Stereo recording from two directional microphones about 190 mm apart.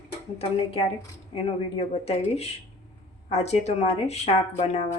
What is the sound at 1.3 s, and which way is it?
Speech, 30° left (ahead or behind).